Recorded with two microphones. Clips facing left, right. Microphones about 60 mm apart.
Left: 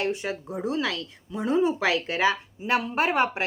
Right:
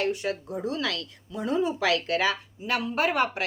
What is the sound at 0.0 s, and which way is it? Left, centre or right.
A woman's voice, left.